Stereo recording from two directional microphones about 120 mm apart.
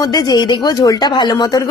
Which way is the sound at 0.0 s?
35° left (ahead or behind).